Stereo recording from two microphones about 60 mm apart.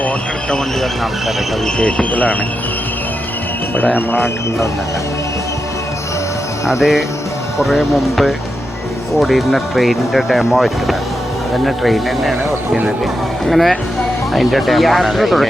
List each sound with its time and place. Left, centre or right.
1.6 s speech: centre
3.8 s speech: left
6.7 s speech: centre
13.4 s speech: centre